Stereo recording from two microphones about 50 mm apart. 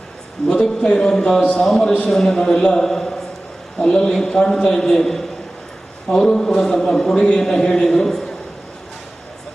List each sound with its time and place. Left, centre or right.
0.4 s a man's voice: centre
1.6 s a man's voice: centre